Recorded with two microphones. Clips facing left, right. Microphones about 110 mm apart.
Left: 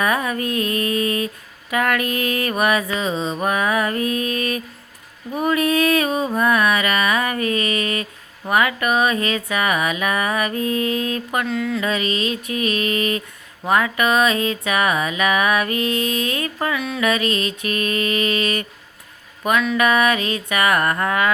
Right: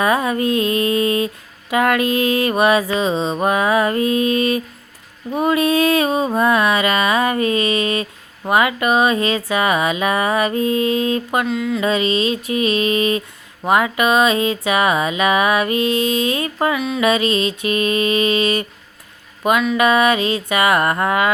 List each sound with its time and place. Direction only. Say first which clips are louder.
0.0 s mantra: right 4 dB; 25° right (ahead or behind)
11.4 s music: right 2 dB; 10° right (ahead or behind)
11.8 s mantra: right 4 dB; 25° right (ahead or behind)
19.4 s speech: right 3 dB; 20° right (ahead or behind)
19.7 s mantra: right 2 dB; 20° right (ahead or behind)